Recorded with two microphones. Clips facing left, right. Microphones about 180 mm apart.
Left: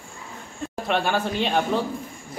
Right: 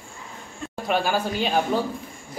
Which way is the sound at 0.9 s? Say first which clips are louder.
Even; 5° right (ahead or behind).